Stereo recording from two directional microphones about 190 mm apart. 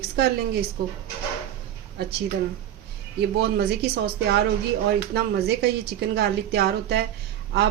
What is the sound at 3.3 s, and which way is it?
Speech, 60° right (ahead or behind).